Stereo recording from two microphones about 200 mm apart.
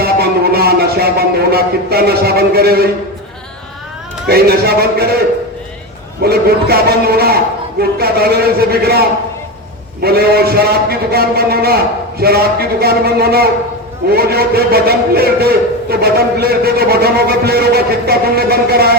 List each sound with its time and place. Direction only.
0.0 s a sound: 50° right (ahead or behind)
4.3 s a man's voice: 50° right (ahead or behind)
6.2 s a man's voice: 50° right (ahead or behind)